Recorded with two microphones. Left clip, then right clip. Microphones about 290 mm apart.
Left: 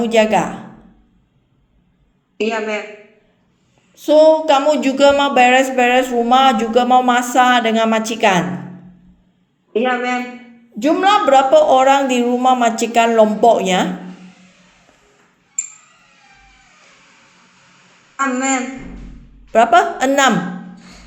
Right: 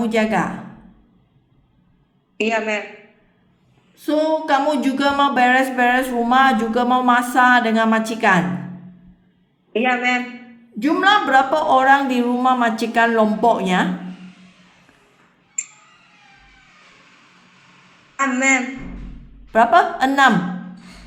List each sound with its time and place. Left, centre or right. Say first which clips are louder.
0.0 s speech: left 5 dB; centre
2.4 s a woman's voice: left 1 dB; centre
3.9 s a sound: left 8 dB; right
4.5 s speech: left 4 dB; centre
9.7 s a woman's voice: left 1 dB; centre
18.2 s a woman's voice: right 1 dB; centre
19.5 s speech: left 2 dB; centre